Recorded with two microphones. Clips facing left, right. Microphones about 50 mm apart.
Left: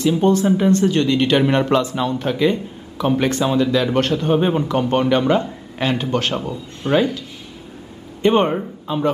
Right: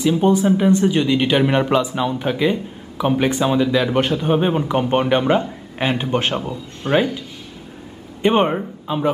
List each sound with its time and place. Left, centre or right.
0.0 s speech: centre
6.3 s speech: centre
8.2 s a man's voice: centre